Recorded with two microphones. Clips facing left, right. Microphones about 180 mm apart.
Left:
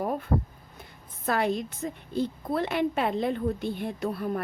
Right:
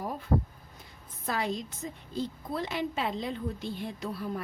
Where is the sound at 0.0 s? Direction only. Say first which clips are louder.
Left 7 dB; 55° left (ahead or behind).